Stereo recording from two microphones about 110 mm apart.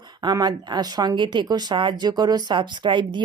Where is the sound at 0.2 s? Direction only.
40° right (ahead or behind).